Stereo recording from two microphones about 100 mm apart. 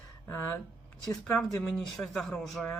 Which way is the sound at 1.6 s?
5° left (ahead or behind).